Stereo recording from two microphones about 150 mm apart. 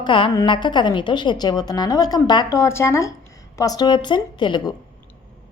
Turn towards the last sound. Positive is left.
turn(degrees=30)  # may be behind; listen again after turning